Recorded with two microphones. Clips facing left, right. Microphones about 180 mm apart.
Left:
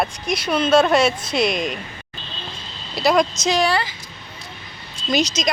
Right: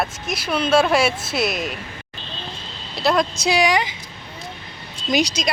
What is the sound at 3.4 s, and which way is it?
Speech, 10° right (ahead or behind).